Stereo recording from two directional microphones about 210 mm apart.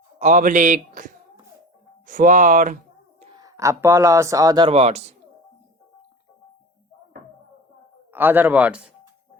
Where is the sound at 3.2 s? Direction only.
20° right (ahead or behind).